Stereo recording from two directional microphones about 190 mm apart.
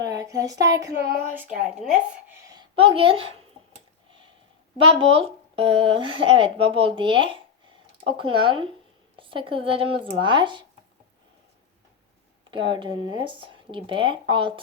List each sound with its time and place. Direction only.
0.0 s a sound: 20° right (ahead or behind)
0.7 s speech: 15° right (ahead or behind)
1.4 s speech: 5° right (ahead or behind)
2.5 s a woman's voice: 25° right (ahead or behind)
4.8 s speech: 30° right (ahead or behind)
12.5 s speech: 25° right (ahead or behind)